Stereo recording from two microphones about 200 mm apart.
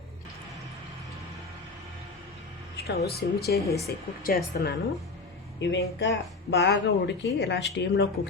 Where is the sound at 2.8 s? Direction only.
50° left (ahead or behind).